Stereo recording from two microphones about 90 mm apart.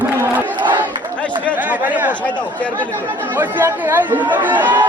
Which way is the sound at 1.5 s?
20° right (ahead or behind).